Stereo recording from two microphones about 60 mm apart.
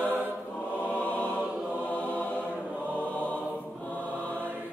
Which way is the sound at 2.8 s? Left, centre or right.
Left.